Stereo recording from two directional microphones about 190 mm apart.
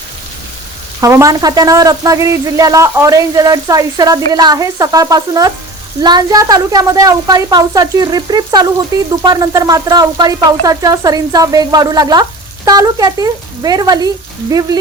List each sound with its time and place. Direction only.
1.0 s speech: 15° right (ahead or behind)